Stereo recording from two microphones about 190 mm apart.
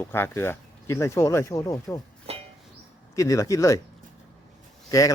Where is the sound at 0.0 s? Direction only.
10° left (ahead or behind).